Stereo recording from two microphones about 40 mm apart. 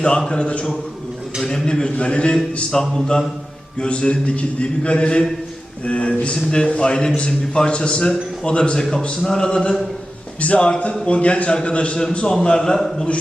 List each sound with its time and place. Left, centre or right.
0.3 s a man's voice: left
1.4 s a man's voice: centre
2.8 s a man's voice: centre
3.8 s a man's voice: left
6.3 s a man's voice: centre
10.4 s a man's voice: left
12.3 s a man's voice: centre